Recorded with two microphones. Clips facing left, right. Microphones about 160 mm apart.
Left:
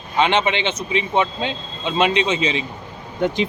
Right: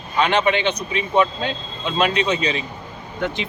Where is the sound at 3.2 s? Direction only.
45° left (ahead or behind).